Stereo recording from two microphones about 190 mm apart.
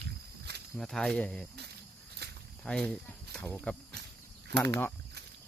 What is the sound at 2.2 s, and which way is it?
Snake, 60° right (ahead or behind).